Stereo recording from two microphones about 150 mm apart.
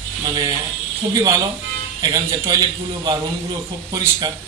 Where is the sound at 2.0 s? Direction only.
20° right (ahead or behind).